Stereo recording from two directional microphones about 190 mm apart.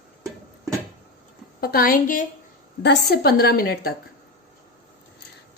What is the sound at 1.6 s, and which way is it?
A woman's voice, 50° left (ahead or behind).